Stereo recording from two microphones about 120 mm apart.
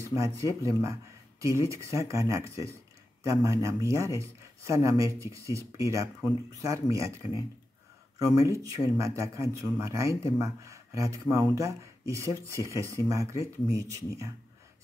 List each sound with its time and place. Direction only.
0.0 s speech: 25° right (ahead or behind)